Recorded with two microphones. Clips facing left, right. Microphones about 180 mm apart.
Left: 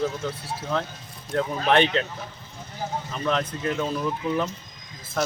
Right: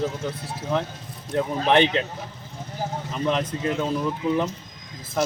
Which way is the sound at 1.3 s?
20° right (ahead or behind).